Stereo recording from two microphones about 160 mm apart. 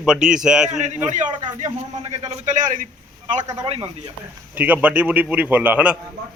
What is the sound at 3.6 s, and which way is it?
Speech, 35° right (ahead or behind).